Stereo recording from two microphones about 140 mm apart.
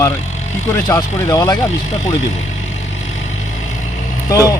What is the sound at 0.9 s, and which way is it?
Speech, 30° left (ahead or behind).